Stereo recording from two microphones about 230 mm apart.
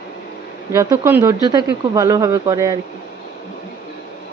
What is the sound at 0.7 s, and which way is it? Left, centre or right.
Speech, centre.